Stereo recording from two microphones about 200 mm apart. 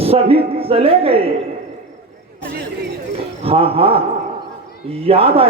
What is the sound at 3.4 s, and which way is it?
A man's voice, 30° right (ahead or behind).